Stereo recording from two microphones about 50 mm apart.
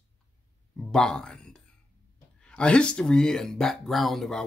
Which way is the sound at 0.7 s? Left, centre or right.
Centre.